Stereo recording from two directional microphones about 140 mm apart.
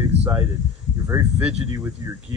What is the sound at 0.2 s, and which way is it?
Speech, 15° right (ahead or behind).